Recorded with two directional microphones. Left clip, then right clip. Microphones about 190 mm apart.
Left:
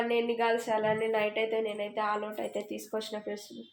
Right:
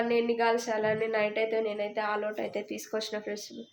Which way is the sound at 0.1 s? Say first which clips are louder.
Right 2 dB; 5° right (ahead or behind).